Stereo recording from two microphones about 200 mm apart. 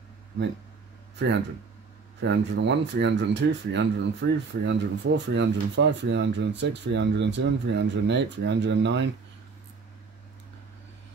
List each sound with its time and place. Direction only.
2.2 s speech: 60° right (ahead or behind)